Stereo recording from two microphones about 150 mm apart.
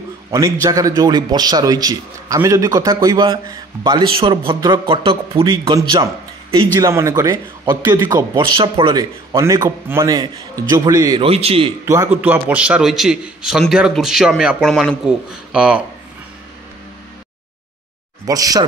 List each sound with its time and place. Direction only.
0.3 s a man's voice: 20° right (ahead or behind)
6.8 s a man's voice: 20° right (ahead or behind); by 9.0 s 35° right (ahead or behind)
9.3 s a man's voice: 20° right (ahead or behind)
11.1 s a man's voice: 40° right (ahead or behind)
11.8 s a man's voice: 20° right (ahead or behind)
18.2 s a man's voice: 25° right (ahead or behind)